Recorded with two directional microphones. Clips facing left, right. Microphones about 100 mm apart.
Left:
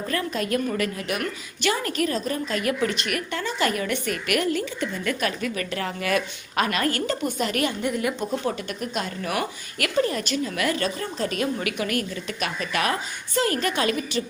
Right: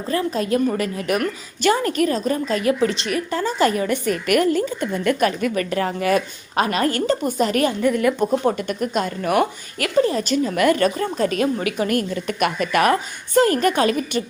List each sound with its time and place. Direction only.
0.1 s a woman's voice: 30° right (ahead or behind); by 9.5 s 50° right (ahead or behind)
9.7 s a woman's voice: 30° right (ahead or behind)